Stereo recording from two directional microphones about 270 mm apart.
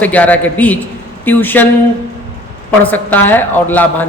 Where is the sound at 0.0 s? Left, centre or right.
Centre.